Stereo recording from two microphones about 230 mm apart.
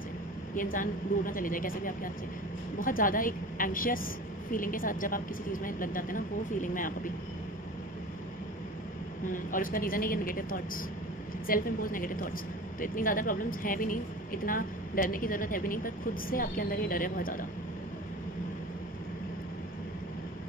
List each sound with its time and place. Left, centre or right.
0.6 s a woman's voice: left
9.3 s a woman's voice: left